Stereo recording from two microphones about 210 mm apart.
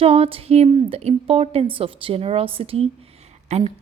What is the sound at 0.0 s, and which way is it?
A woman's voice, 30° right (ahead or behind).